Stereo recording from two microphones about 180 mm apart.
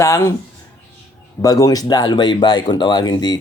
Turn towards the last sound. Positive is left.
turn(degrees=25)  # may be behind; listen again after turning